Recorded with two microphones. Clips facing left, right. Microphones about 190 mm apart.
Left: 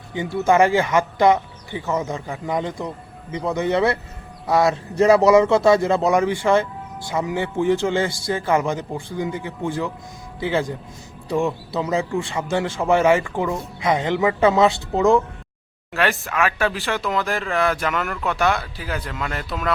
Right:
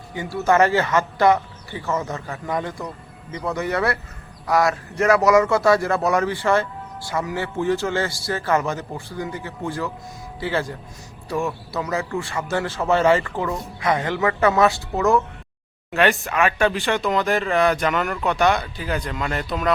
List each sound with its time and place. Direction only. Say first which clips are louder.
0.1 s a man's voice: left 1 dB; 20° left (ahead or behind)
15.9 s speech: right 3 dB; centre (ahead or behind)